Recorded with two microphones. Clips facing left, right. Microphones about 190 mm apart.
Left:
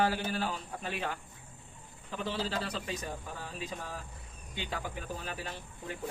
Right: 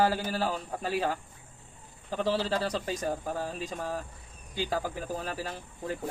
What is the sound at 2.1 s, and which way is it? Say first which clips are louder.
A man's voice: right 7 dB; 35° right (ahead or behind).